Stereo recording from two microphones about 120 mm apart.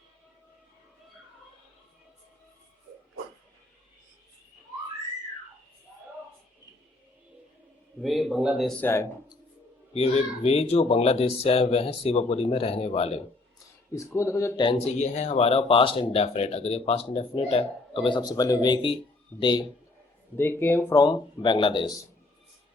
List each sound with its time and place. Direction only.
8.0 s a man's voice: centre (ahead or behind)
8.8 s speech: 20° left (ahead or behind)
9.9 s speech: 55° left (ahead or behind)
13.9 s speech: 25° left (ahead or behind)
14.5 s speech: 45° left (ahead or behind)
14.9 s speech: 75° left (ahead or behind); by 19.6 s 40° left (ahead or behind)
20.3 s speech: 20° left (ahead or behind)
20.9 s speech: 35° left (ahead or behind)